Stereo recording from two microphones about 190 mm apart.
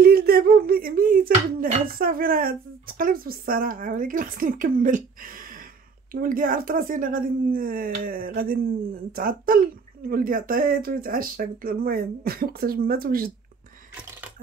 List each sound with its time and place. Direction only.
0.0 s speech: 55° right (ahead or behind)